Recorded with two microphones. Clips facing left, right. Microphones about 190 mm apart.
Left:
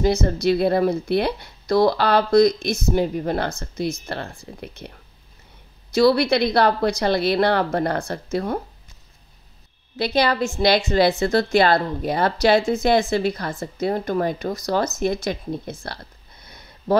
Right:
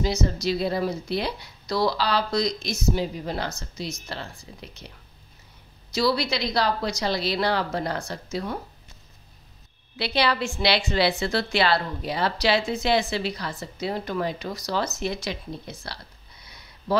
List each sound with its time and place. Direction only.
0.0 s a woman's voice: 55° left (ahead or behind)
9.9 s a woman's voice: 45° left (ahead or behind)